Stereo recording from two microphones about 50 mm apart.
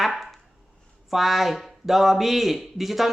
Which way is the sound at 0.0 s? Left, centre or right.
Centre.